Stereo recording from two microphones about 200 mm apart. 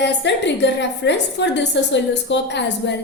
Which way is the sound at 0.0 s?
60° left (ahead or behind).